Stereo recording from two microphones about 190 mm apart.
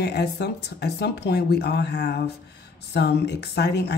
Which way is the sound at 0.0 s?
60° left (ahead or behind).